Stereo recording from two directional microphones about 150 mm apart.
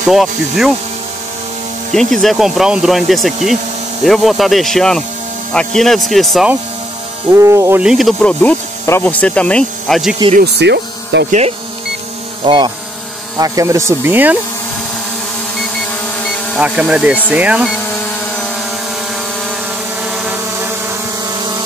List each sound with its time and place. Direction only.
0.1 s speech: centre (ahead or behind)
2.0 s speech: centre (ahead or behind)
7.3 s speech: 20° right (ahead or behind)
7.8 s speech: centre (ahead or behind)
10.3 s speech: 90° right
11.2 s speech: 50° right (ahead or behind)
12.4 s speech: 30° right (ahead or behind)
13.4 s speech: 20° right (ahead or behind)
16.5 s speech: 10° right (ahead or behind)
20.0 s vehicle: 5° right (ahead or behind)